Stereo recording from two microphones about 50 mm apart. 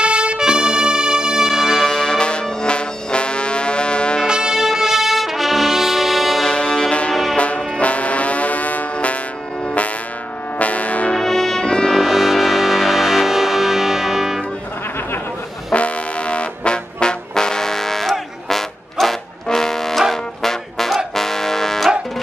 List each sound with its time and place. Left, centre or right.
0.0 s music: right
1.8 s brass instrument: centre
4.3 s brass instrument: centre
6.4 s brass instrument: left
8.9 s music: left
10.6 s music: left
11.1 s brass instrument: centre
11.6 s music: centre
12.0 s music: centre
15.7 s trombone: left; by 21.9 s centre